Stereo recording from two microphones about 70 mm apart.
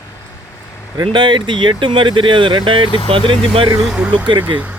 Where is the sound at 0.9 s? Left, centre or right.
Right.